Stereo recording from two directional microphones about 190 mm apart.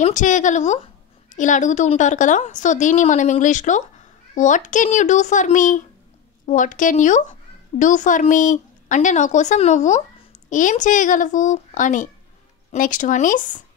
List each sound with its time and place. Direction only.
0.0 s a woman's voice: 40° left (ahead or behind)